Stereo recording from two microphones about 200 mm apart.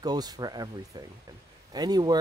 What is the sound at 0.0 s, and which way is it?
Speech, 20° right (ahead or behind).